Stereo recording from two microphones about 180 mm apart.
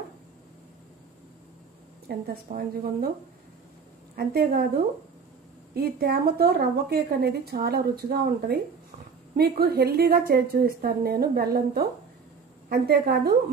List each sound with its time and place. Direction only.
2.0 s a woman's voice: 55° right (ahead or behind)
4.1 s a woman's voice: 55° right (ahead or behind)
5.8 s a woman's voice: 60° right (ahead or behind)